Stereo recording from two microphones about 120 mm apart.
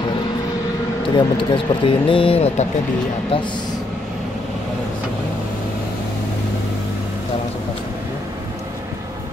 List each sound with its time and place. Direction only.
1.1 s speech: 40° left (ahead or behind); by 2.7 s 65° left (ahead or behind)